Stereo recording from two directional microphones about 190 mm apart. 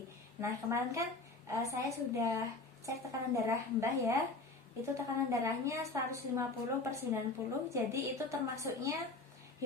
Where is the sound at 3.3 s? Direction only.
15° right (ahead or behind).